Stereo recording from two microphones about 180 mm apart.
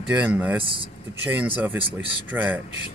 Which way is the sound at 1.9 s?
10° right (ahead or behind).